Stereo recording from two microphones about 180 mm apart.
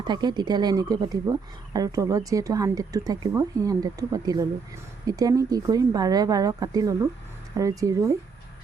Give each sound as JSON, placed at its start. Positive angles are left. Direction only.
{"t": 0.0, "sound": "speech", "side_deg": -25}